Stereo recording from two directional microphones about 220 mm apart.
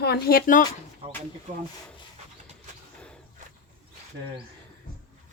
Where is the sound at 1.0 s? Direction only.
25° right (ahead or behind).